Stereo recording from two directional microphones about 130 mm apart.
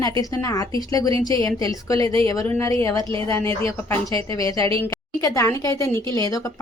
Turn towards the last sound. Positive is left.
turn(degrees=25)  # may be behind; listen again after turning